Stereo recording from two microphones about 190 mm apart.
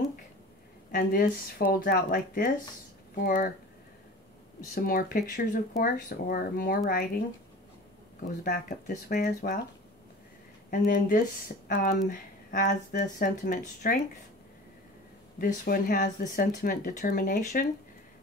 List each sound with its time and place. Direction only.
0.9 s speech: 50° left (ahead or behind)
4.7 s speech: 50° left (ahead or behind)
8.5 s speech: 50° left (ahead or behind)
10.7 s speech: 45° left (ahead or behind)
15.3 s speech: 50° left (ahead or behind)